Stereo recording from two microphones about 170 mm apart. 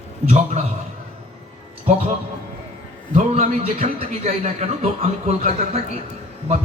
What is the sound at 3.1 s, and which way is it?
A man's voice, 40° right (ahead or behind).